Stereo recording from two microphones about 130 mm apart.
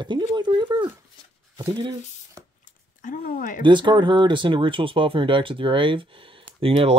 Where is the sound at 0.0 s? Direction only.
35° right (ahead or behind).